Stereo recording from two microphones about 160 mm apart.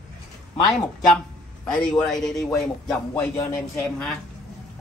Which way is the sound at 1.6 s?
5° left (ahead or behind).